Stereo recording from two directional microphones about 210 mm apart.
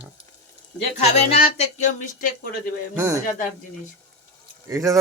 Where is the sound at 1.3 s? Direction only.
35° left (ahead or behind).